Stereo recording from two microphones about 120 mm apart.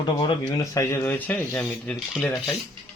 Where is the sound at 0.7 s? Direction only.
20° left (ahead or behind).